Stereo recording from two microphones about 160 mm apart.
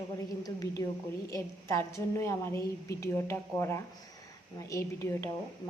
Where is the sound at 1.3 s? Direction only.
20° left (ahead or behind).